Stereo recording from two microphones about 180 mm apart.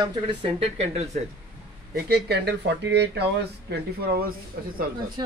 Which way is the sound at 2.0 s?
60° right (ahead or behind).